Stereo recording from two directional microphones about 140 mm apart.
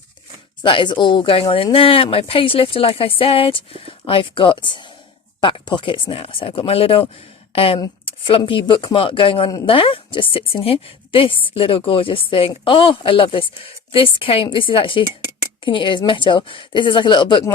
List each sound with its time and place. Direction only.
0.6 s a woman's voice: 35° left (ahead or behind)